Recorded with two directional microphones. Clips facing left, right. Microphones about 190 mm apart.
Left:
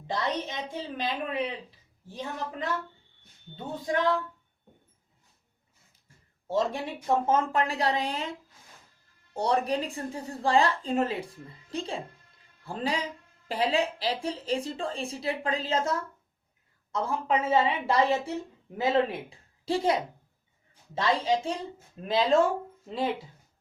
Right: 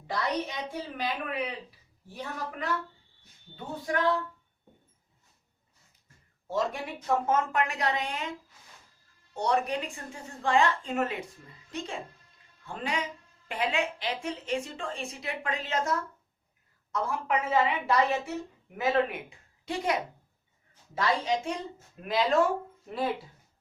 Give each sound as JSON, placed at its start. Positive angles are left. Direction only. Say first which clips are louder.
{"t": 0.1, "sound": "a woman's voice", "louder": "even", "side_deg": 25}
{"t": 6.5, "sound": "a woman's voice", "louder": "left 3 dB", "side_deg": 30}
{"t": 9.3, "sound": "a woman's voice", "louder": "left 2 dB", "side_deg": 30}